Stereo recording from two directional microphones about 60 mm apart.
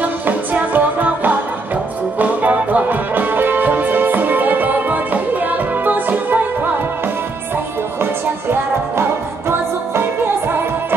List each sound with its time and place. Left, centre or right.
0.6 s music: right
8.0 s music: right